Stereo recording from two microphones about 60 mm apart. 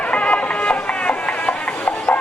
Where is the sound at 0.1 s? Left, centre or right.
Centre.